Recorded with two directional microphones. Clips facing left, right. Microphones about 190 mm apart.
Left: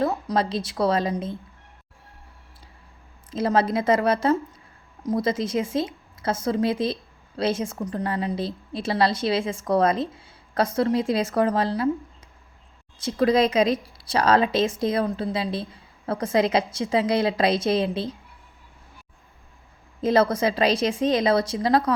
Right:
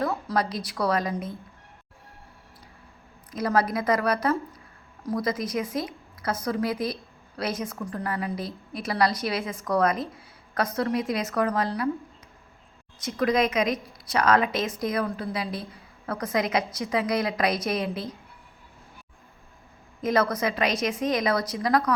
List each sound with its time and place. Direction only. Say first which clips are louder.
0.0 s a woman's voice: left 3 dB; 20° left (ahead or behind)
3.3 s a woman's voice: left 3 dB; 25° left (ahead or behind)
13.0 s a woman's voice: left 4 dB; 30° left (ahead or behind)
20.0 s a woman's voice: left 4 dB; 30° left (ahead or behind)